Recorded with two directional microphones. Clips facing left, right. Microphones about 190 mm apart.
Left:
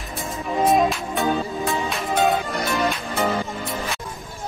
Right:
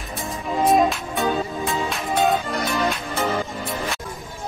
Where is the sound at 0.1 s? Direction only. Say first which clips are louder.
Even; centre (ahead or behind).